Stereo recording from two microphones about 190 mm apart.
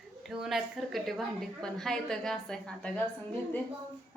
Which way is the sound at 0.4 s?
Centre (ahead or behind).